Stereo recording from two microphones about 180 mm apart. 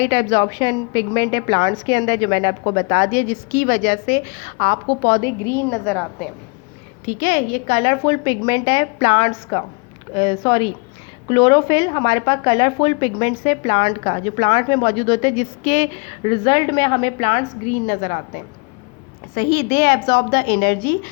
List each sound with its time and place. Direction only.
0.0 s speech: 30° left (ahead or behind); by 5.1 s 50° left (ahead or behind)
5.2 s a woman's voice: 15° left (ahead or behind)
7.0 s a woman's voice: 50° left (ahead or behind)
8.0 s a woman's voice: 25° left (ahead or behind); by 18.2 s 50° left (ahead or behind)
19.3 s a woman's voice: 60° left (ahead or behind)